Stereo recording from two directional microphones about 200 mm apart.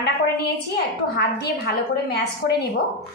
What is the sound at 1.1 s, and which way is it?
A woman's voice, 50° left (ahead or behind).